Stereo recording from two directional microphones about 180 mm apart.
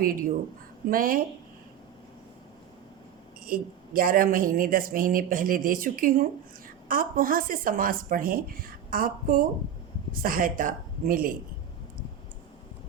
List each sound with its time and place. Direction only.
0.0 s speech: 50° right (ahead or behind)
3.4 s speech: 55° right (ahead or behind)